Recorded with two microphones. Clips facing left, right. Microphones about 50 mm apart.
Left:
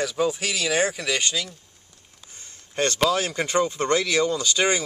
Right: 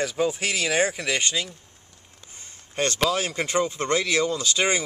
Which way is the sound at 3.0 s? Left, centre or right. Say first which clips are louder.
Left 2 dB; centre.